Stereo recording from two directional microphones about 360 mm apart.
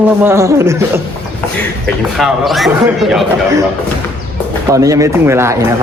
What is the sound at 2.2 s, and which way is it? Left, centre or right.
A man's voice, centre.